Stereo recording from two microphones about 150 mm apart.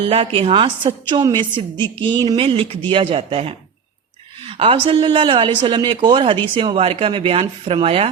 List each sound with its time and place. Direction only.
0.0 s speech: 40° right (ahead or behind)